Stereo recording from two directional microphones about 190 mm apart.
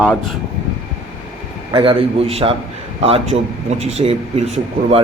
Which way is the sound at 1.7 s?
30° right (ahead or behind).